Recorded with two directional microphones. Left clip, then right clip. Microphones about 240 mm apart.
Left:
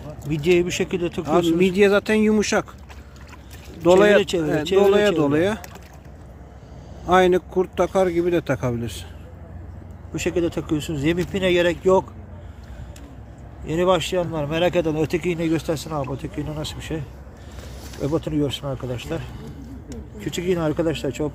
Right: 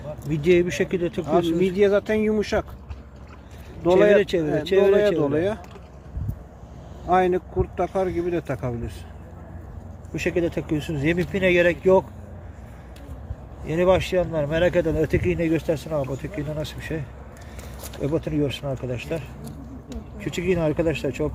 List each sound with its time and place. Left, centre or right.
0.4 s speech: centre
1.2 s speech: left
3.8 s speech: left
4.2 s speech: centre
4.9 s speech: left
7.1 s speech: left
10.2 s speech: centre
13.7 s speech: centre